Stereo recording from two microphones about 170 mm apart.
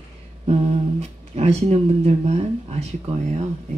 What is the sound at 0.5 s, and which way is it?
Speech, 40° right (ahead or behind).